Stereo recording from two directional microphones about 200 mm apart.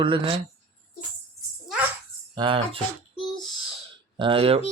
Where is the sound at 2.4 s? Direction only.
25° right (ahead or behind).